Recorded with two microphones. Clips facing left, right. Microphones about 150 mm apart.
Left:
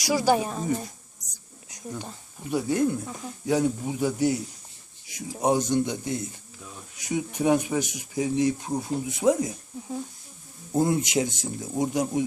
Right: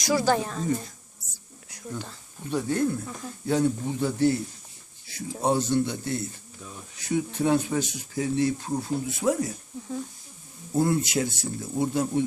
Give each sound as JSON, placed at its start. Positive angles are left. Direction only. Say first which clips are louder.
{"t": 0.0, "sound": "speech", "louder": "left 1 dB", "side_deg": 15}
{"t": 10.8, "sound": "speech", "louder": "left 1 dB", "side_deg": 20}